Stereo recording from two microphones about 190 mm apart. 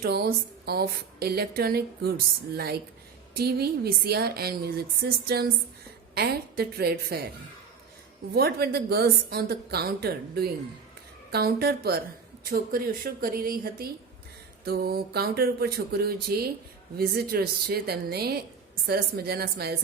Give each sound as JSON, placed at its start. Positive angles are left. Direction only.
{"t": 0.0, "sound": "speech", "side_deg": -55}
{"t": 8.4, "sound": "a woman's voice", "side_deg": -55}